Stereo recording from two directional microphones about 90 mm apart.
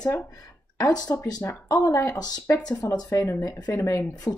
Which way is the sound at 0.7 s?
45° left (ahead or behind).